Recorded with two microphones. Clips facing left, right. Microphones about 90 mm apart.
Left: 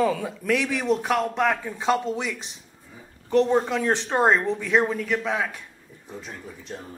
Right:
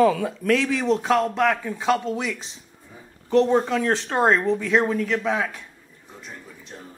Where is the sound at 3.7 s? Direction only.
10° left (ahead or behind).